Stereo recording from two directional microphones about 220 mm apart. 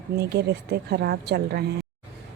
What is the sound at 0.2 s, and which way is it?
Speech, 50° right (ahead or behind).